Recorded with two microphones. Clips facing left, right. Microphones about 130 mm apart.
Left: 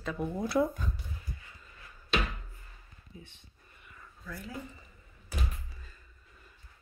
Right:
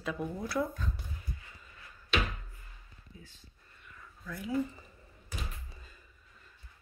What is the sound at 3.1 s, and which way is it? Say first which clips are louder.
Speech: left 4 dB; 25° left (ahead or behind).